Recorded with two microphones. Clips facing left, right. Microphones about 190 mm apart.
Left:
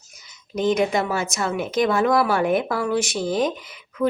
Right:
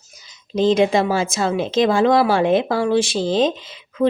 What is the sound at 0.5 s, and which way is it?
Speech, 25° right (ahead or behind).